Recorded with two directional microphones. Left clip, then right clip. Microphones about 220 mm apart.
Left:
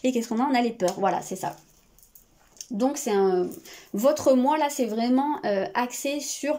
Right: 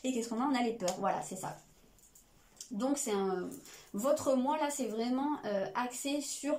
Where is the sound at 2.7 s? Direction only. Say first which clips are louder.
Left 10 dB; 40° left (ahead or behind).